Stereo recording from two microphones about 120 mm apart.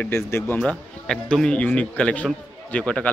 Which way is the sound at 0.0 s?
20° left (ahead or behind).